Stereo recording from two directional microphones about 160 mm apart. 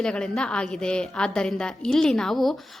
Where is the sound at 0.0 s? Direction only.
5° left (ahead or behind).